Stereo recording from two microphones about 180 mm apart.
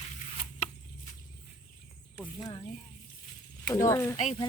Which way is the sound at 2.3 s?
25° left (ahead or behind).